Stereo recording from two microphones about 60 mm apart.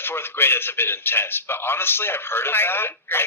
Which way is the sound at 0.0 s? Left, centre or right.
Left.